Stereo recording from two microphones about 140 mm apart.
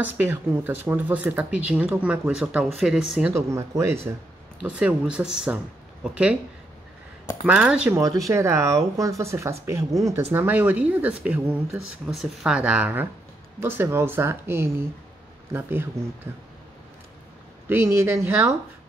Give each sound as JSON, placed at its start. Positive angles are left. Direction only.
{"t": 0.0, "sound": "speech", "side_deg": -15}
{"t": 3.3, "sound": "speech", "side_deg": -20}
{"t": 4.6, "sound": "speech", "side_deg": -10}
{"t": 7.4, "sound": "speech", "side_deg": -10}
{"t": 7.9, "sound": "speech", "side_deg": -25}
{"t": 12.1, "sound": "speech", "side_deg": -5}
{"t": 17.6, "sound": "speech", "side_deg": -20}